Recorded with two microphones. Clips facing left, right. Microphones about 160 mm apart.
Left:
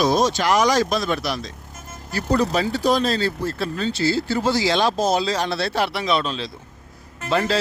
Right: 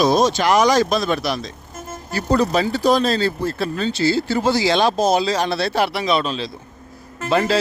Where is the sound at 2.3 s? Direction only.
60° right (ahead or behind).